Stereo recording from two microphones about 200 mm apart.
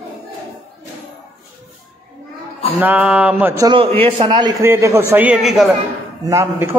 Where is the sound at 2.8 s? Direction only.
10° right (ahead or behind).